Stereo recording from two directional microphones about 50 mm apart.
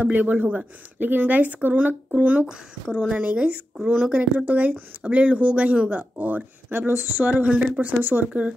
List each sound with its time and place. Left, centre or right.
0.0 s speech: right
4.0 s speech: centre
4.5 s speech: right
7.2 s speech: right
8.0 s speech: right